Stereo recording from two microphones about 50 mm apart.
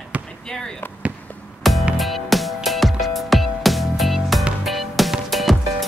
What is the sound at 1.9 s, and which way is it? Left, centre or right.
Music, centre.